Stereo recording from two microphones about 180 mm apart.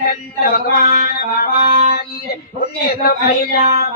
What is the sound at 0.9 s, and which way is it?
Music, 55° left (ahead or behind).